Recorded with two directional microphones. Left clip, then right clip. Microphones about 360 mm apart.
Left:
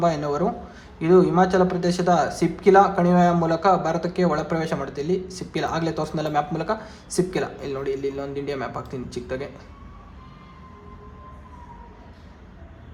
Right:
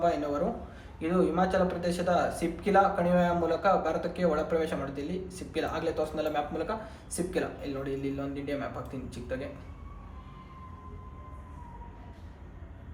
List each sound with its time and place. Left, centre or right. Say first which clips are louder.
0.0 s speech: left 6 dB; centre